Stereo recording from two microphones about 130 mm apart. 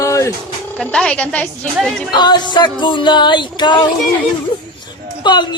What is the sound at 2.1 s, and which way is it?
Speech, 35° left (ahead or behind).